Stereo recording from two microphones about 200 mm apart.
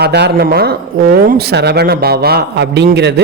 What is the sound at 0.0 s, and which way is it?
Speech, 55° right (ahead or behind).